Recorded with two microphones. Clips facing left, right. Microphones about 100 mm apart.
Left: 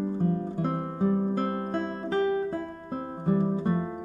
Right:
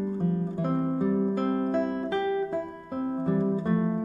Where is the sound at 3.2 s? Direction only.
15° left (ahead or behind).